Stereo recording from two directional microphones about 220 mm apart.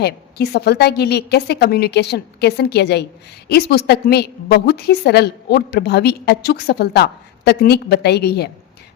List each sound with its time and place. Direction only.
0.0 s a woman's voice: 45° left (ahead or behind)